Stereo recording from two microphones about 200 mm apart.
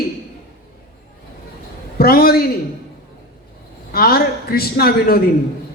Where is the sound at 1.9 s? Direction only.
50° left (ahead or behind).